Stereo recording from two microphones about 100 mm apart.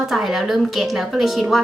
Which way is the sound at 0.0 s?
Centre (ahead or behind).